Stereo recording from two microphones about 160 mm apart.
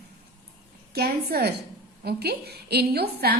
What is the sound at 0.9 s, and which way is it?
A woman's voice, 85° right.